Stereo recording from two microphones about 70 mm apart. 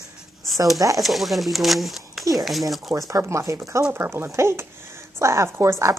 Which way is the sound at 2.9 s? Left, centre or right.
Right.